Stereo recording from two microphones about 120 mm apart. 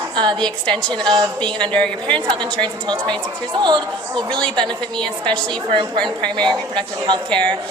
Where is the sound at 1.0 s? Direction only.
40° right (ahead or behind).